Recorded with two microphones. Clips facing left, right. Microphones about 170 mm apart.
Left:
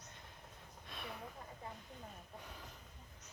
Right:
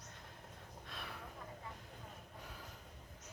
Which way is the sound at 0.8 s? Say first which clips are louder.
Left 2 dB; centre (ahead or behind).